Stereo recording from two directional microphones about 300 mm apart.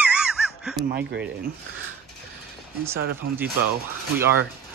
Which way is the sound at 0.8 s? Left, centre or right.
Right.